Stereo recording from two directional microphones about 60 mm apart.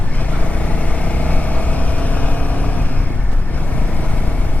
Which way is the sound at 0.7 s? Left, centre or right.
Left.